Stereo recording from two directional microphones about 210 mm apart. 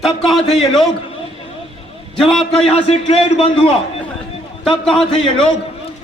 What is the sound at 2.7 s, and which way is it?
Speech, 30° left (ahead or behind).